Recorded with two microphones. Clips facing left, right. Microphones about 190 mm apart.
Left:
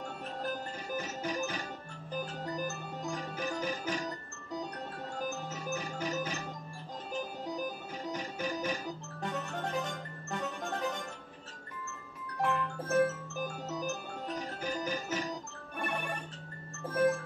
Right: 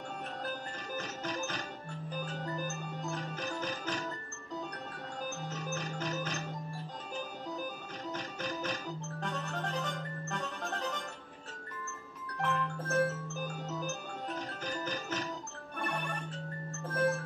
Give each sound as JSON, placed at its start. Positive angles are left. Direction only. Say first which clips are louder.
{"t": 0.9, "sound": "music", "louder": "left 3 dB", "side_deg": 10}
{"t": 2.5, "sound": "organ", "louder": "left 1 dB", "side_deg": 15}
{"t": 5.5, "sound": "music", "louder": "left 1 dB", "side_deg": 10}
{"t": 7.5, "sound": "music", "louder": "left 3 dB", "side_deg": 10}
{"t": 12.4, "sound": "music", "louder": "left 2 dB", "side_deg": 15}
{"t": 14.6, "sound": "music", "louder": "left 2 dB", "side_deg": 10}
{"t": 16.9, "sound": "music", "louder": "left 3 dB", "side_deg": 15}